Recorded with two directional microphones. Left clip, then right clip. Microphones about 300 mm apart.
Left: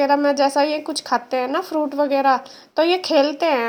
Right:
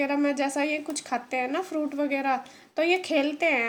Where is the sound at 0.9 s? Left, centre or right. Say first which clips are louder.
Left 8 dB; centre.